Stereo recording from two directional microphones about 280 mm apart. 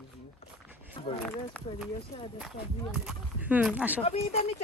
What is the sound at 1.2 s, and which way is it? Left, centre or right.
Speech, centre.